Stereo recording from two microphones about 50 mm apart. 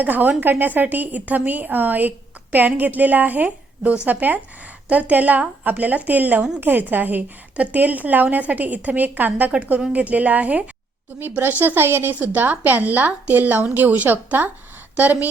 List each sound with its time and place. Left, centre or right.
0.0 s speech: right
11.2 s a woman's voice: right
12.2 s speech: right